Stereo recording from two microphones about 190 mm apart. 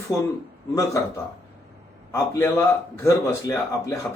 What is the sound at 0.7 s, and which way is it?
A man's voice, 15° left (ahead or behind).